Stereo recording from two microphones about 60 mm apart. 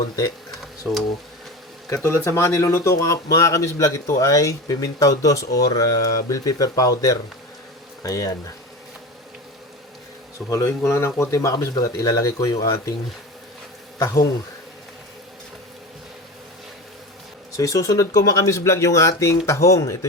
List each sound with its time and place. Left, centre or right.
2.0 s speech: left
10.5 s speech: left
10.8 s speech: left
14.0 s speech: left
17.6 s speech: left